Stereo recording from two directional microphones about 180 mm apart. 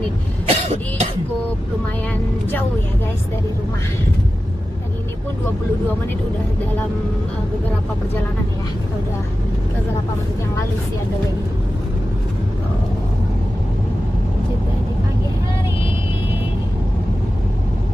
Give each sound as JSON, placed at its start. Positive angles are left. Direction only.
{"t": 0.5, "sound": "cough", "side_deg": -35}